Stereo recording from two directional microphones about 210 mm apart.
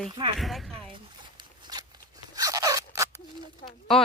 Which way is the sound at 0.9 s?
20° right (ahead or behind).